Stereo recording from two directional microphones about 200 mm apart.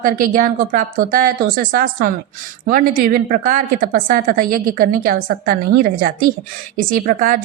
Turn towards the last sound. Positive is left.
turn(degrees=-45)  # may be behind; listen again after turning